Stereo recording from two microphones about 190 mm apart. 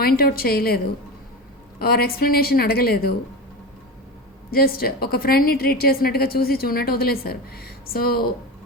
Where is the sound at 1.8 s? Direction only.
55° left (ahead or behind).